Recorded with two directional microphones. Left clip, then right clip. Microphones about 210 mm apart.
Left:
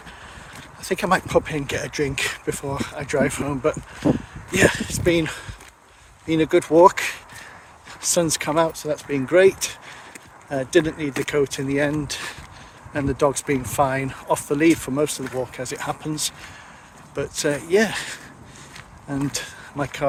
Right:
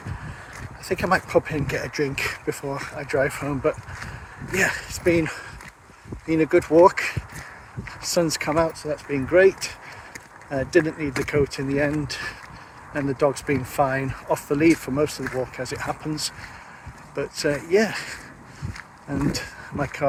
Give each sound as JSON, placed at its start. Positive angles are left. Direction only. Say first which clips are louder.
{"t": 0.9, "sound": "speech", "louder": "left 1 dB", "side_deg": 10}